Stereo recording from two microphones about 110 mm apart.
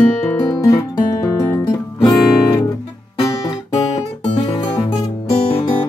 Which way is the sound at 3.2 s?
30° left (ahead or behind).